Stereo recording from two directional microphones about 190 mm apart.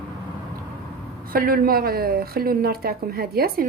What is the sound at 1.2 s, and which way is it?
Speech, 50° right (ahead or behind).